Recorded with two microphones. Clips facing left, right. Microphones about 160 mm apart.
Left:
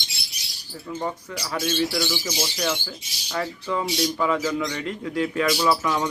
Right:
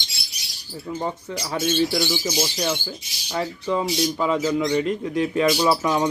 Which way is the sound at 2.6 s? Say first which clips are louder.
Right 1 dB; 20° right (ahead or behind).